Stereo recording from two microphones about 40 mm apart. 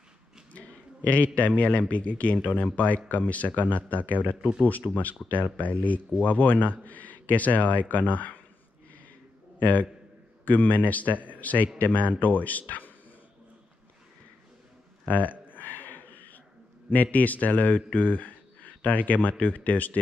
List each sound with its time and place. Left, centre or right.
0.5 s a man's voice: left
9.6 s a man's voice: left
15.0 s a sound: left
16.9 s speech: left